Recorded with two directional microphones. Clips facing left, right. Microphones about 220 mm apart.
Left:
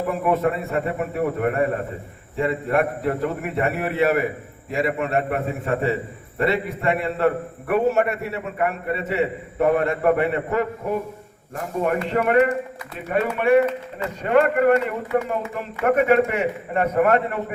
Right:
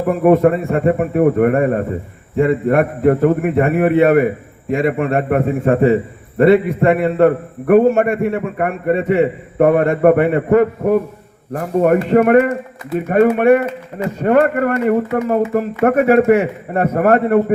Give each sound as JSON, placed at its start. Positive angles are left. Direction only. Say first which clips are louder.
{"t": 0.2, "sound": "a man's voice", "louder": "right 12 dB", "side_deg": -50}
{"t": 6.9, "sound": "a man's voice", "louder": "right 7 dB", "side_deg": -50}